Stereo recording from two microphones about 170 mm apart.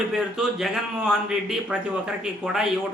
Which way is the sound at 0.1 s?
Centre (ahead or behind).